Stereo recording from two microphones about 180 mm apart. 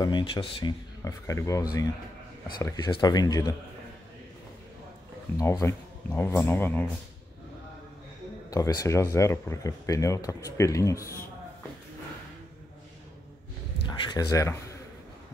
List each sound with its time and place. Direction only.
0.0 s speech: 25° left (ahead or behind)
5.4 s speech: 15° left (ahead or behind)
8.5 s speech: 20° left (ahead or behind)
13.8 s speech: 25° left (ahead or behind)